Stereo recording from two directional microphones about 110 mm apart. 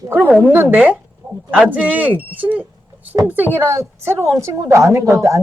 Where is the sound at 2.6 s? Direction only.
15° right (ahead or behind).